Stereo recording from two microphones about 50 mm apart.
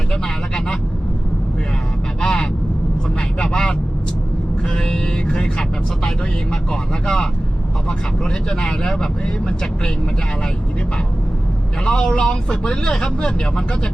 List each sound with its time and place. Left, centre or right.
2.2 s vehicle: centre
6.5 s speech: centre
11.9 s speech: centre